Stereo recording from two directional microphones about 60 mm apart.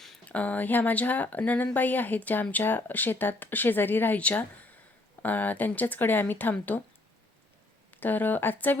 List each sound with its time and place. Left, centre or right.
0.3 s speech: left
4.2 s speech: left
7.9 s speech: left